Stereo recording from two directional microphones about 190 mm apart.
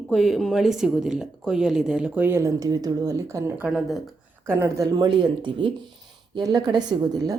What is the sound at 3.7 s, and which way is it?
Speech, centre (ahead or behind).